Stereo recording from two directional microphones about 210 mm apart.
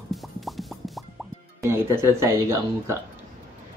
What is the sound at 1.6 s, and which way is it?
Speech, 10° right (ahead or behind).